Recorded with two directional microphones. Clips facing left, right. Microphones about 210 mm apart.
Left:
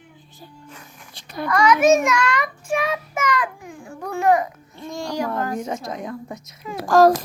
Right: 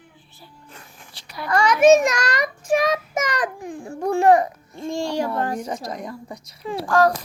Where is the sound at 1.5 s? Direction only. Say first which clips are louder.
Right 2 dB; 30° right (ahead or behind).